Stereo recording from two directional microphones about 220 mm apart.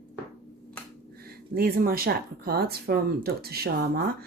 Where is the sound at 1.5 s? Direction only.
40° right (ahead or behind).